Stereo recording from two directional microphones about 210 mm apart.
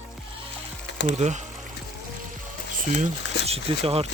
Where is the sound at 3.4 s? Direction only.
30° right (ahead or behind).